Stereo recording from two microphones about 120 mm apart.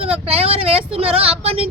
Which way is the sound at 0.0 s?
55° right (ahead or behind).